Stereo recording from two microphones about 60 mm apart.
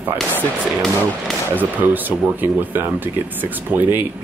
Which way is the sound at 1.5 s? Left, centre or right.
Right.